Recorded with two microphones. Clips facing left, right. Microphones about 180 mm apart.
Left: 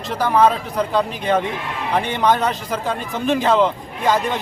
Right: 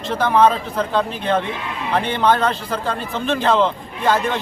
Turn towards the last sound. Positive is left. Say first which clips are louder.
# even
turn(degrees=15)  # may be behind; listen again after turning